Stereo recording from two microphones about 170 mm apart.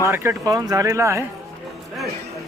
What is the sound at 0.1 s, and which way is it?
Speech, 15° right (ahead or behind).